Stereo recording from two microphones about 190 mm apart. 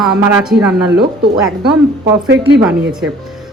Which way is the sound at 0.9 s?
25° right (ahead or behind).